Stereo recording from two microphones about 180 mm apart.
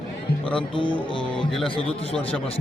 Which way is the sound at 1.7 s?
30° left (ahead or behind).